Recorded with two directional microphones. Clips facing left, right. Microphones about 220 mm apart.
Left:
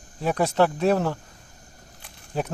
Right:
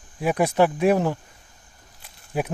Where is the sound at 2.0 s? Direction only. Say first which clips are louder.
Right 2 dB; 10° right (ahead or behind).